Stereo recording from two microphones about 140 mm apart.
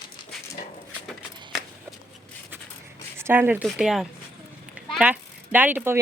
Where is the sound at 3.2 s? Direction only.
15° right (ahead or behind).